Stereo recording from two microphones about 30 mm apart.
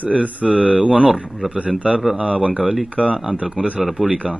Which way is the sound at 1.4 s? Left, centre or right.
Centre.